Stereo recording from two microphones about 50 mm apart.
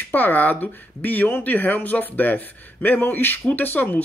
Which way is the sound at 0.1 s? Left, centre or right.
Left.